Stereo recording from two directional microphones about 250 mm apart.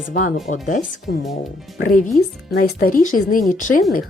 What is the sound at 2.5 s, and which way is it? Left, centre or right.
Speech, left.